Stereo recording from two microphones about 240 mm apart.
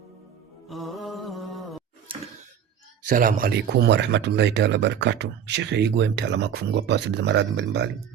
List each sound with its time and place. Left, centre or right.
0.7 s music: centre
2.1 s a sound: right
3.0 s speech: right